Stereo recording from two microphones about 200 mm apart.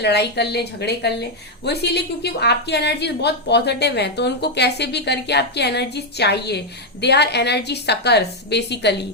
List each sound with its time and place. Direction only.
0.0 s speech: 55° left (ahead or behind)